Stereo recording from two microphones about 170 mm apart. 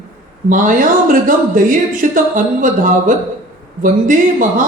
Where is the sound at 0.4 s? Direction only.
50° right (ahead or behind).